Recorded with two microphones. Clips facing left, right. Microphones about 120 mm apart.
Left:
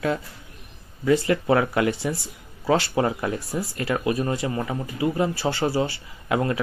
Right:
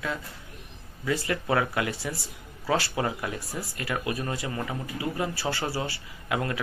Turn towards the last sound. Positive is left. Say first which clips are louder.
# left 6 dB
turn(degrees=30)  # may be behind; listen again after turning